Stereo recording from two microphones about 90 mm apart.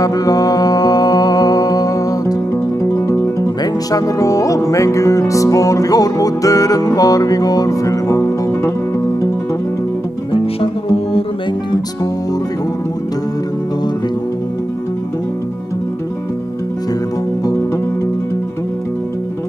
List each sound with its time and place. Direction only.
0.0 s music: 45° left (ahead or behind)
10.3 s music: 80° left